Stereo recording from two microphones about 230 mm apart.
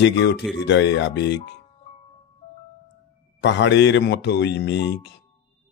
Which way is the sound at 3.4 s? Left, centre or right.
Left.